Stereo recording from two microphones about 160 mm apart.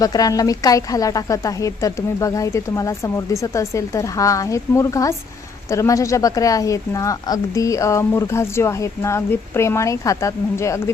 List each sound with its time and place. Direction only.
0.0 s speech: 25° left (ahead or behind)